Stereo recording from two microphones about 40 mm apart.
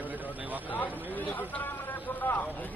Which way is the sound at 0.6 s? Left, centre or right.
Left.